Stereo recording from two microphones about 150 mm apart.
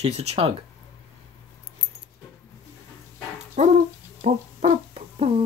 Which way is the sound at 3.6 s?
50° right (ahead or behind).